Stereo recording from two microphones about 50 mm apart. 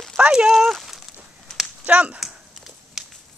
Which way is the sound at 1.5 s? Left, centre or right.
Centre.